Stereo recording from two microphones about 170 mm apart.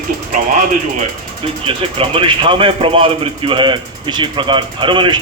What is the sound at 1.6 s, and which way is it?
Speech, 30° right (ahead or behind).